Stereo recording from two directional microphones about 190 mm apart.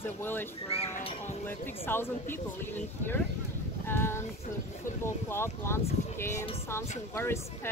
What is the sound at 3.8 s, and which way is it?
Female singing, 10° left (ahead or behind).